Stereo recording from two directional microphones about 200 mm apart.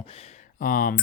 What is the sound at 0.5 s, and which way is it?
Speech, 45° left (ahead or behind).